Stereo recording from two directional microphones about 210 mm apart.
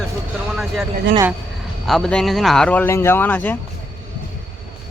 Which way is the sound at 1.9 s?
5° left (ahead or behind).